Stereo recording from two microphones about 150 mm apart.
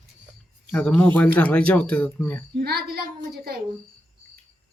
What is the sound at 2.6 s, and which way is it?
Speech, 90° right.